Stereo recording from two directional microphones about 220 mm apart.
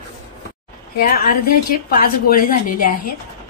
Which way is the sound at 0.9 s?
40° left (ahead or behind).